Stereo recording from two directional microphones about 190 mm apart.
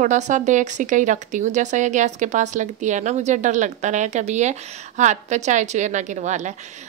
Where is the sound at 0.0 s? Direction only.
40° right (ahead or behind).